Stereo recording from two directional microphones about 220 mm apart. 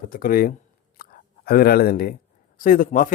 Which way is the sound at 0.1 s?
40° left (ahead or behind).